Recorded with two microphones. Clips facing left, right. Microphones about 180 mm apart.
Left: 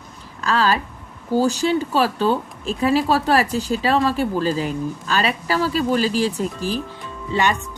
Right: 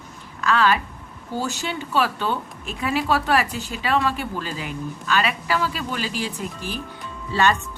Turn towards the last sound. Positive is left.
turn(degrees=15)  # may be behind; listen again after turning